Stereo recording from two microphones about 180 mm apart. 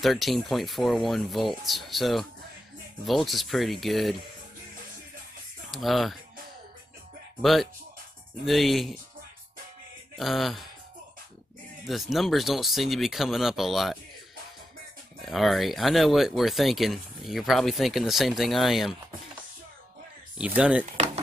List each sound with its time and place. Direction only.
0.0 s speech: centre (ahead or behind)
5.7 s speech: centre (ahead or behind)
7.4 s speech: centre (ahead or behind)
10.1 s speech: centre (ahead or behind)
11.8 s speech: centre (ahead or behind)
15.2 s speech: centre (ahead or behind)
20.3 s speech: 5° right (ahead or behind)
20.8 s speech: 35° right (ahead or behind)